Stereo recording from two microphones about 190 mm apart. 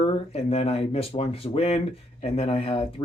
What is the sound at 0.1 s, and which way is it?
Speech, 30° left (ahead or behind).